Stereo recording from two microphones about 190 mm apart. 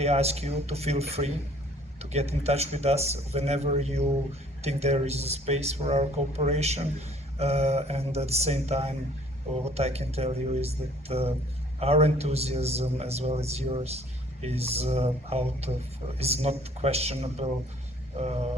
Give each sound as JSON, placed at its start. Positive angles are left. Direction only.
{"t": 0.0, "sound": "speech", "side_deg": -35}